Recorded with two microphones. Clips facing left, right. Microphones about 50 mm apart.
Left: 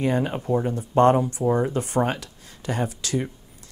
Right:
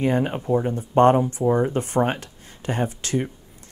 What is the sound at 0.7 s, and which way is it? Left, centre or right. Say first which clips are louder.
Speech: right 1 dB; right.